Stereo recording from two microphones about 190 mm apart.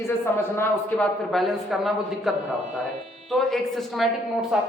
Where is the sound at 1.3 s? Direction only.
Centre (ahead or behind).